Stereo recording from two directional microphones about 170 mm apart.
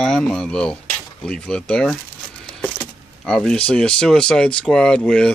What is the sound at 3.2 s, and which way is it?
Speech, 5° left (ahead or behind).